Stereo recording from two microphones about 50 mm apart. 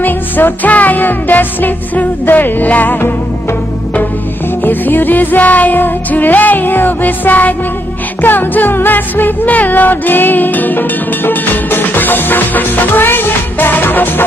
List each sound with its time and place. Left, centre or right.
0.0 s music: left
4.6 s music: left